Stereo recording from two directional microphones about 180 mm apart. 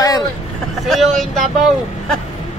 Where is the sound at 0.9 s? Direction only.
Centre (ahead or behind).